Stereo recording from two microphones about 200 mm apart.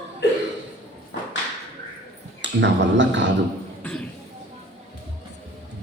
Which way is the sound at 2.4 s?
65° right (ahead or behind).